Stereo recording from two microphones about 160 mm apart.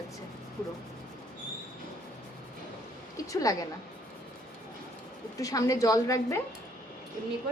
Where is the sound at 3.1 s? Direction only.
20° left (ahead or behind).